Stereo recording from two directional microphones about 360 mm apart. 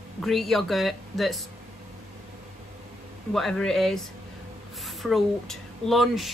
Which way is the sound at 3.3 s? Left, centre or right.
Centre.